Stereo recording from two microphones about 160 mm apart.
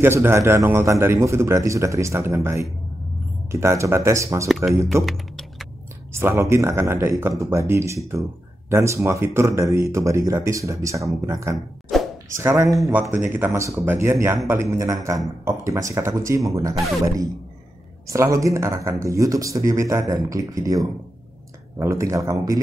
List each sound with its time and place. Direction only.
0.0 s speech: 15° right (ahead or behind)
5.0 s typing: centre (ahead or behind)
6.1 s speech: 15° right (ahead or behind)
11.5 s a sound: centre (ahead or behind)
12.3 s speech: 15° right (ahead or behind)
18.0 s speech: 20° right (ahead or behind)